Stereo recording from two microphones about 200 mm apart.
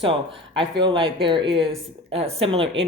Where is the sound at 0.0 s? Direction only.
25° right (ahead or behind).